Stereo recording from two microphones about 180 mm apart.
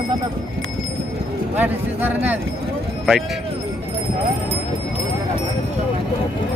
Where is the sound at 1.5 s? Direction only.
10° right (ahead or behind).